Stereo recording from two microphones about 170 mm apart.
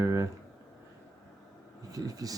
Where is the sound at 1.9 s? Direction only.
20° right (ahead or behind).